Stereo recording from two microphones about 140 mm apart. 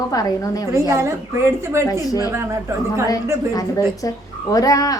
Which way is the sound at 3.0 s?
25° left (ahead or behind).